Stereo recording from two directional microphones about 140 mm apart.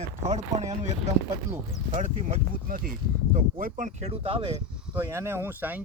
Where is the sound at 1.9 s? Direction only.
55° right (ahead or behind).